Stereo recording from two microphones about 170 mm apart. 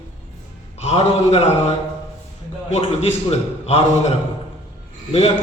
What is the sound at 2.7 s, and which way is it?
A man's voice, 40° left (ahead or behind).